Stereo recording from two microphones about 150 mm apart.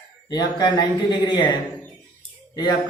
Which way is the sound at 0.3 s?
25° left (ahead or behind).